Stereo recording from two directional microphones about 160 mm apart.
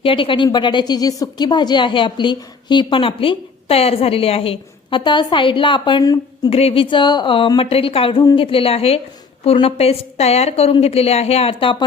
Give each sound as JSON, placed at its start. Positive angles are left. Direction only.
{"t": 0.0, "sound": "a woman's voice", "side_deg": 35}
{"t": 6.5, "sound": "a woman's voice", "side_deg": 40}